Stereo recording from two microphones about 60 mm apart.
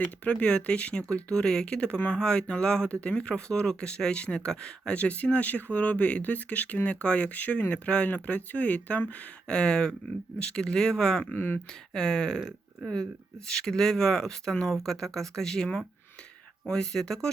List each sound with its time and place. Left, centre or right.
0.3 s speech: centre
11.3 s speech: left
11.9 s speech: centre
13.5 s speech: centre